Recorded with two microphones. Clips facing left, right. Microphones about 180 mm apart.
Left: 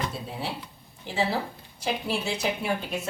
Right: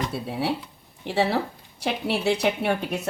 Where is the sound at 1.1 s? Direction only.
70° right (ahead or behind).